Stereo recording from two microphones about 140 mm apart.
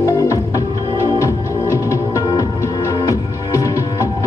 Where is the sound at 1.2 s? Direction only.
20° left (ahead or behind).